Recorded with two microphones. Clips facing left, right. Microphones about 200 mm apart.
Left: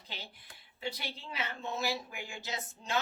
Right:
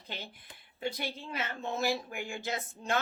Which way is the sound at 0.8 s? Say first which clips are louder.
Right 4 dB; 50° right (ahead or behind).